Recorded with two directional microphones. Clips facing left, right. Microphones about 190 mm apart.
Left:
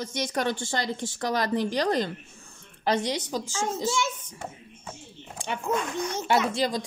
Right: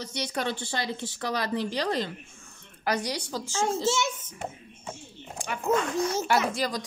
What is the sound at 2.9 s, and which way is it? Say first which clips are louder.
Speech: left 3 dB; 25° left (ahead or behind).